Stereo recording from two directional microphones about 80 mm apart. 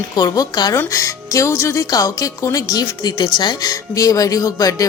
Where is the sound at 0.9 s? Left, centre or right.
Left.